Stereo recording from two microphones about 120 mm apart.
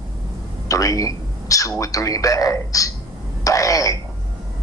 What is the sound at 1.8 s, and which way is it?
A man's voice, 30° left (ahead or behind).